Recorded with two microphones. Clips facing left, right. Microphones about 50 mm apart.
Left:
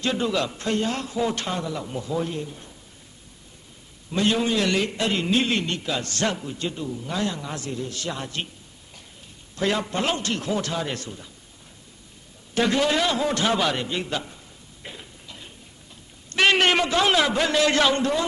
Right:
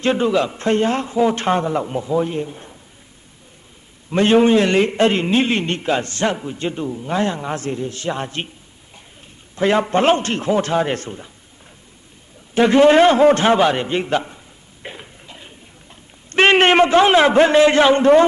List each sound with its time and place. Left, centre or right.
0.0 s a man's voice: right
0.3 s a man's voice: right
4.1 s a man's voice: right
9.6 s a man's voice: right
12.5 s a man's voice: right
14.8 s a sound: right
16.3 s a man's voice: right